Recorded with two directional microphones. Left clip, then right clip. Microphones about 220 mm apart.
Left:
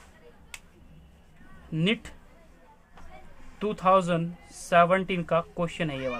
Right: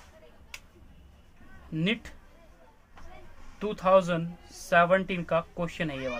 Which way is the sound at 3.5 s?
20° left (ahead or behind).